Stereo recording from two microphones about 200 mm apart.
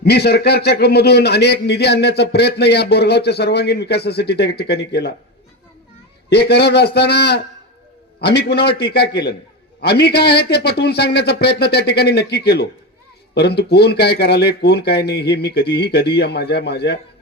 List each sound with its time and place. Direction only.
0.0 s speech: 55° left (ahead or behind)
6.3 s speech: 55° left (ahead or behind)